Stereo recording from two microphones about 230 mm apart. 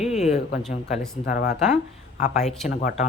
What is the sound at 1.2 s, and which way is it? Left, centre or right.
Speech, left.